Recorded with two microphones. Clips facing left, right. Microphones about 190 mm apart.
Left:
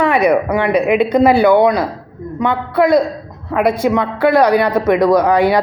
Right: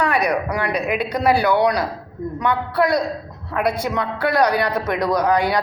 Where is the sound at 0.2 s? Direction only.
55° left (ahead or behind).